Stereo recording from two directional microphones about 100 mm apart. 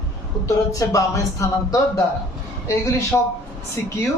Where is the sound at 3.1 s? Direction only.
20° left (ahead or behind).